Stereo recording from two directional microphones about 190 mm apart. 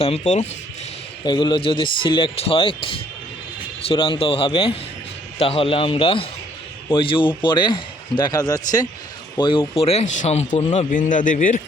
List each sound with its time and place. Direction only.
0.0 s speech: 35° left (ahead or behind)
1.2 s a man's voice: 25° left (ahead or behind); by 11.6 s 40° left (ahead or behind)